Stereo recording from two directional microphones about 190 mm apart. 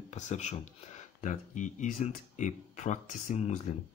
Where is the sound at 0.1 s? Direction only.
35° left (ahead or behind).